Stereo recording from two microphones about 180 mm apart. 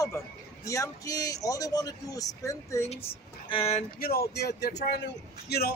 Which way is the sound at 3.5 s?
35° left (ahead or behind).